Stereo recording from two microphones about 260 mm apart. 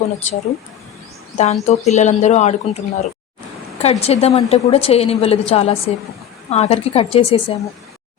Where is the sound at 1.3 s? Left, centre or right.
Left.